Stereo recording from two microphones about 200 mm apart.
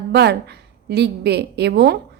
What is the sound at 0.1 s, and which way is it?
A woman's voice, 55° right (ahead or behind).